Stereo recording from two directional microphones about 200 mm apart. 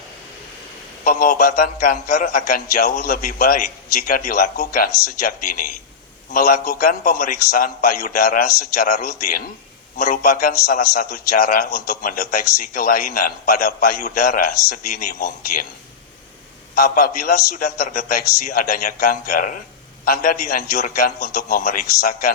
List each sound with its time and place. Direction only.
1.0 s a man's voice: 45° left (ahead or behind)
16.7 s a man's voice: 50° left (ahead or behind)